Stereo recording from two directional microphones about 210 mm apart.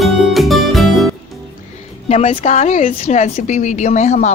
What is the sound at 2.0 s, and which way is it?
A woman's voice, 30° left (ahead or behind).